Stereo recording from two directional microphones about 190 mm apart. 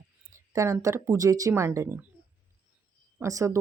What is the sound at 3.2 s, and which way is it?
Speech, 15° right (ahead or behind).